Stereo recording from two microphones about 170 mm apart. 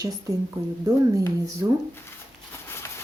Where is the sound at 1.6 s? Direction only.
15° right (ahead or behind).